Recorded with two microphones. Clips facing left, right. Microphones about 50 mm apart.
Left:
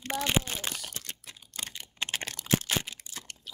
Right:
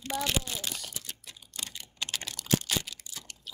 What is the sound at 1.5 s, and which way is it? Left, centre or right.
Computer keyboard, left.